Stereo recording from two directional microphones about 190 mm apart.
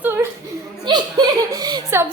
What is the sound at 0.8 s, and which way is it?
Speech, 20° right (ahead or behind).